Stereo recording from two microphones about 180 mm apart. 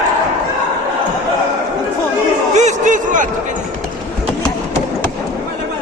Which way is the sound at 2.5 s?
45° right (ahead or behind).